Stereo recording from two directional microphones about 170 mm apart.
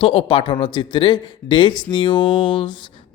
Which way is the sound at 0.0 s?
30° left (ahead or behind).